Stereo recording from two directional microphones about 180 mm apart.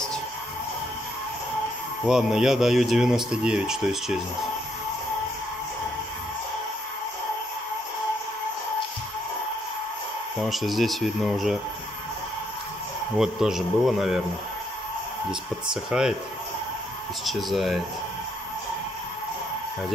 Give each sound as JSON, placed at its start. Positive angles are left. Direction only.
{"t": 2.0, "sound": "speech", "side_deg": -5}
{"t": 10.4, "sound": "speech", "side_deg": 0}
{"t": 13.2, "sound": "speech", "side_deg": 0}
{"t": 15.7, "sound": "speech", "side_deg": -5}
{"t": 17.2, "sound": "speech", "side_deg": 0}